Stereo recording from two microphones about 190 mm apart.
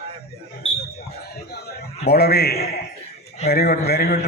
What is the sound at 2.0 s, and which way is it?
A man's voice, 55° left (ahead or behind).